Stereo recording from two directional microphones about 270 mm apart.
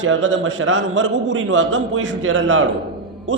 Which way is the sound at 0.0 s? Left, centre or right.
Right.